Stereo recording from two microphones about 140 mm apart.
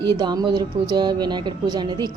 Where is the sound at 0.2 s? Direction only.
30° right (ahead or behind).